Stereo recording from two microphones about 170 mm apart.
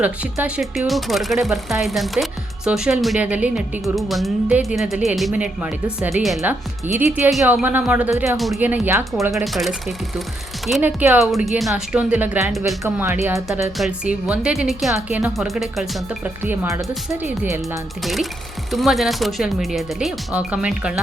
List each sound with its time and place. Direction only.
0.0 s speech: 10° right (ahead or behind)
6.5 s speech: 10° right (ahead or behind)
10.8 s speech: 10° right (ahead or behind)
13.7 s speech: 5° right (ahead or behind)
18.0 s speech: centre (ahead or behind)